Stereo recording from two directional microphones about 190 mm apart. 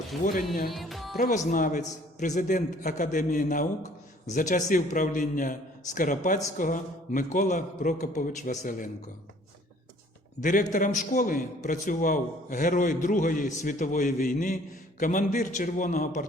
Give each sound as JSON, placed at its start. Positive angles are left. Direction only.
{"t": 0.7, "sound": "music", "side_deg": 0}
{"t": 1.2, "sound": "a man's voice", "side_deg": 40}
{"t": 10.4, "sound": "a man's voice", "side_deg": 40}